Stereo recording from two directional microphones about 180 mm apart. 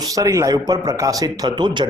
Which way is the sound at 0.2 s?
20° right (ahead or behind).